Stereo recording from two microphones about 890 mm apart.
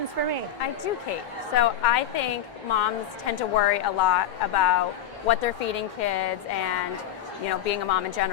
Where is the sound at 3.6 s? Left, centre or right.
Left.